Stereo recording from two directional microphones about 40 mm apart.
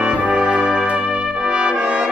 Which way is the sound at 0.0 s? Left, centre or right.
Right.